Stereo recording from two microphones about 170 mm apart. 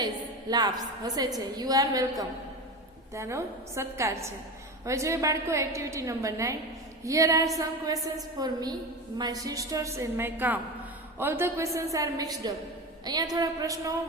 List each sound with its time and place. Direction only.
0.5 s a woman's voice: 25° right (ahead or behind)